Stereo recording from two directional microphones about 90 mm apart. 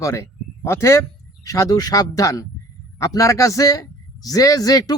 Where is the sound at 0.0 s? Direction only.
35° left (ahead or behind).